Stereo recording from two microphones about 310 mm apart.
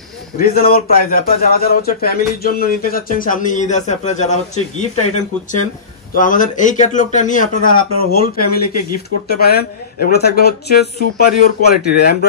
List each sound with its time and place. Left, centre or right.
0.4 s a man's voice: left